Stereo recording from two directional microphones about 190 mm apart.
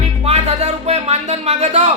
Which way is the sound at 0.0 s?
35° right (ahead or behind).